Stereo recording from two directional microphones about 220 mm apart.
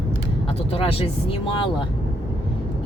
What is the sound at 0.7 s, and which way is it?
Speech, 25° left (ahead or behind).